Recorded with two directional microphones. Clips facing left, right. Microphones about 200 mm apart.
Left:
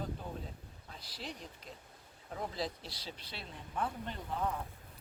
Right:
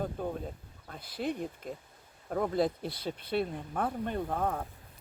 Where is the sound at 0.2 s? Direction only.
55° right (ahead or behind).